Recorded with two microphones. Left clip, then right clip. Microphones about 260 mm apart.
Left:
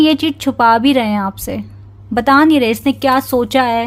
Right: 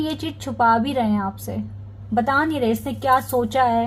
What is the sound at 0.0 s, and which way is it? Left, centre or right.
A woman's voice, left.